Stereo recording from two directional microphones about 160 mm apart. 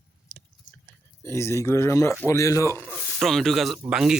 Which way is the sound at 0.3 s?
5° left (ahead or behind).